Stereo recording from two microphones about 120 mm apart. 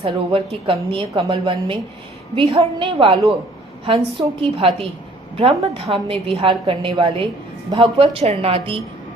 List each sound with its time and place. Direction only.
0.0 s a woman's voice: 50° right (ahead or behind)